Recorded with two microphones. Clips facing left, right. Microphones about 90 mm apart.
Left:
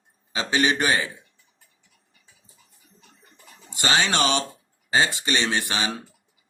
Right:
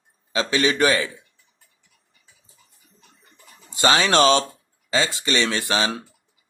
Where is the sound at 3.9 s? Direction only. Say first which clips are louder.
Right 4 dB; 90° right.